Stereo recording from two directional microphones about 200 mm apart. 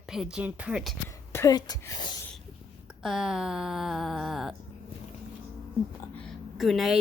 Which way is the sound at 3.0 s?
Centre (ahead or behind).